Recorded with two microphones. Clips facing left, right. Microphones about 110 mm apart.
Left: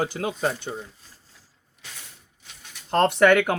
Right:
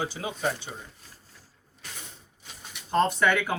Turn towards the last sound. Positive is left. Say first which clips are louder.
# left 7 dB
turn(degrees=60)  # may be behind; listen again after turning